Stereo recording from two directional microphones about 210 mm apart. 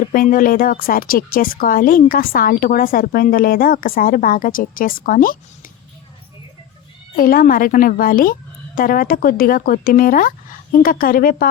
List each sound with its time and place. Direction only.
0.1 s a woman's voice: 40° left (ahead or behind)
7.2 s a woman's voice: 45° left (ahead or behind)